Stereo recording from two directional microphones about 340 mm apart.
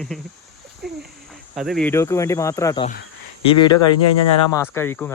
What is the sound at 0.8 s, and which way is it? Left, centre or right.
Speech, right.